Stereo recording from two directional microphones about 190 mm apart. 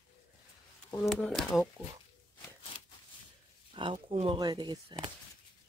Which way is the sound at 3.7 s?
25° right (ahead or behind).